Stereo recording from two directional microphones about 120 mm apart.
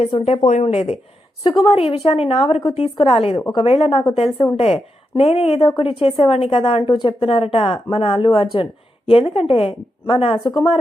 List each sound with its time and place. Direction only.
0.3 s a woman's voice: 65° left (ahead or behind)
1.5 s a woman's voice: 45° left (ahead or behind)
3.3 s a woman's voice: 30° left (ahead or behind)
3.6 s a woman's voice: 55° left (ahead or behind)